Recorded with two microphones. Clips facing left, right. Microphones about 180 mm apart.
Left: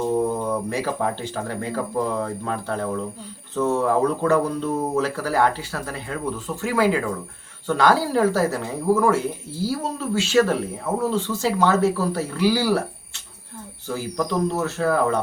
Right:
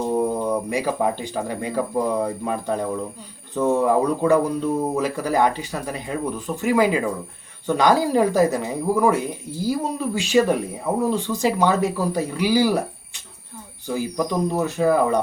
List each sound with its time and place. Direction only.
0.0 s speech: 15° right (ahead or behind)
13.8 s speech: 15° right (ahead or behind)